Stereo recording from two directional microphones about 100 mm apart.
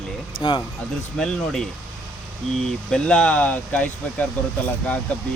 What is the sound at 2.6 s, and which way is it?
Speech, 5° left (ahead or behind).